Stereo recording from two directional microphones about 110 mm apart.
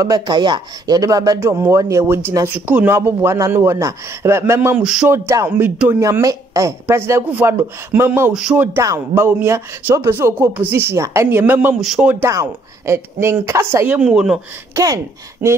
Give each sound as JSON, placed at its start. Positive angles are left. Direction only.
{"t": 0.0, "sound": "speech", "side_deg": -35}
{"t": 4.7, "sound": "speech", "side_deg": -5}
{"t": 5.0, "sound": "speech", "side_deg": -25}
{"t": 8.3, "sound": "speech", "side_deg": -5}
{"t": 8.8, "sound": "speech", "side_deg": -25}
{"t": 11.8, "sound": "a man's voice", "side_deg": -5}
{"t": 12.1, "sound": "speech", "side_deg": -25}
{"t": 13.8, "sound": "speech", "side_deg": -10}
{"t": 15.4, "sound": "speech", "side_deg": -15}